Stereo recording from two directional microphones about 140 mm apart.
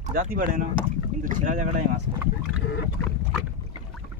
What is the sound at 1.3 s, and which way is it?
Speech, 65° right (ahead or behind).